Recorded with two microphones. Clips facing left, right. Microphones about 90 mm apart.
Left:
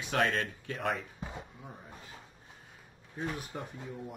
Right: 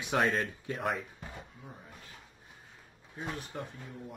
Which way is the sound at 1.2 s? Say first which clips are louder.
Left 3 dB; 20° left (ahead or behind).